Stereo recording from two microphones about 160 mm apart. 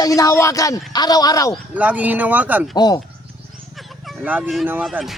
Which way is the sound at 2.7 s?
25° left (ahead or behind).